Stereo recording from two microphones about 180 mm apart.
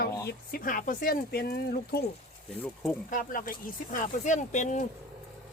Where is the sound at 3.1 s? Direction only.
50° left (ahead or behind).